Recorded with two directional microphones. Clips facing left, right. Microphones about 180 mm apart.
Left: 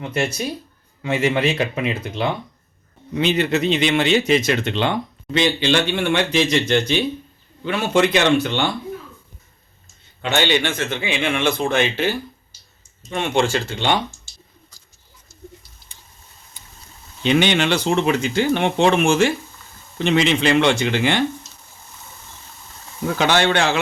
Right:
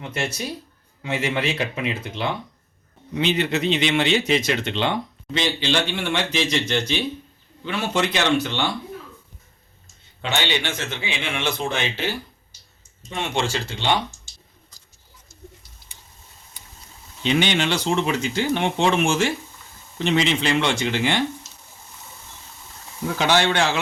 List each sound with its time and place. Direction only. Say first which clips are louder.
1.0 s a man's voice: left 5 dB; 50° left (ahead or behind)
10.3 s a man's voice: left 6 dB; 50° left (ahead or behind)
13.1 s a man's voice: left 5 dB; 55° left (ahead or behind)
17.2 s speech: left 4 dB; 60° left (ahead or behind)
23.1 s speech: left 2 dB; 55° left (ahead or behind)